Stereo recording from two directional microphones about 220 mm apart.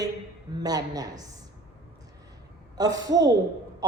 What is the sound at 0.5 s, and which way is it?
Speech, 15° right (ahead or behind).